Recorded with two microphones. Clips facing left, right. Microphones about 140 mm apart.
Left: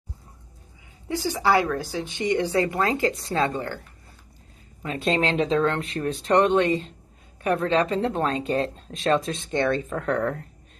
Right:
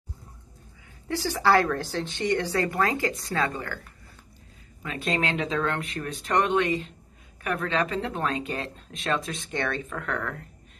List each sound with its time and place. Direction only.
1.0 s speech: 15° left (ahead or behind)
4.8 s speech: 30° left (ahead or behind)